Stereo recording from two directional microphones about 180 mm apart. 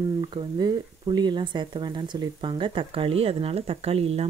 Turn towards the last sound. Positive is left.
turn(degrees=-35)  # may be behind; listen again after turning